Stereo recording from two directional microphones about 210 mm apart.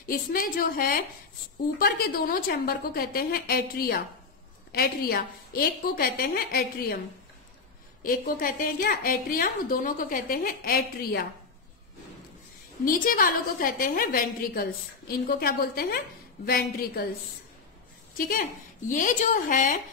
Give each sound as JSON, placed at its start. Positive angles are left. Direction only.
{"t": 0.0, "sound": "a woman's voice", "side_deg": 40}
{"t": 8.0, "sound": "a woman's voice", "side_deg": 40}
{"t": 12.8, "sound": "a woman's voice", "side_deg": 40}
{"t": 18.1, "sound": "a woman's voice", "side_deg": 40}